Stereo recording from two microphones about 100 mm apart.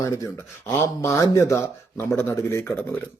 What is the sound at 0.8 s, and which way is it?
Speech, 20° left (ahead or behind).